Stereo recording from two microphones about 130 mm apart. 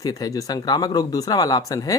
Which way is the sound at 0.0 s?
30° left (ahead or behind).